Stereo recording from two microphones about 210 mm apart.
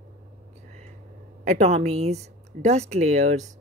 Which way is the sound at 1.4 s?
35° right (ahead or behind).